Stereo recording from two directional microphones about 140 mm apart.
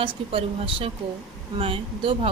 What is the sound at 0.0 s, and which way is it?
Speech, 40° right (ahead or behind).